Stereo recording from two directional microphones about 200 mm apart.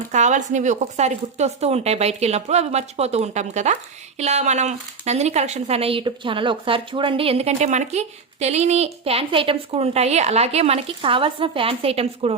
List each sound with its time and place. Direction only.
0.1 s speech: 35° right (ahead or behind)